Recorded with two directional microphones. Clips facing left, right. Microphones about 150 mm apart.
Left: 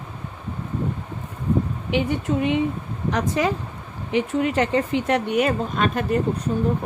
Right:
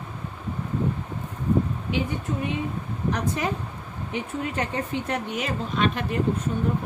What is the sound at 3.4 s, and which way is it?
Speech, 90° left.